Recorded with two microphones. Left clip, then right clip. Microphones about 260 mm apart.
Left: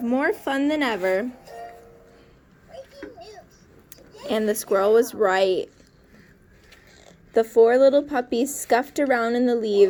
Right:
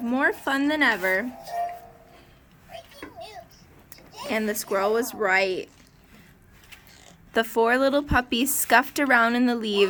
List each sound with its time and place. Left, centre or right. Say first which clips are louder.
0.0 s speech: left 1 dB; centre
4.3 s speech: left 4 dB; centre
7.3 s speech: left 5 dB; centre